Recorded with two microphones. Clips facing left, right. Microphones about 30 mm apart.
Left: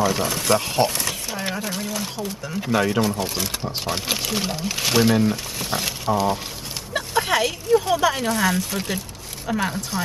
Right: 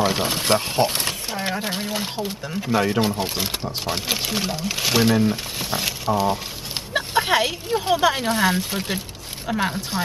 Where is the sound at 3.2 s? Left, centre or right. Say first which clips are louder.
Right 1 dB; right.